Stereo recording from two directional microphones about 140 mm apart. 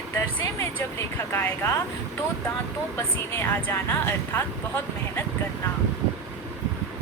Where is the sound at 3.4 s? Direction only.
15° left (ahead or behind).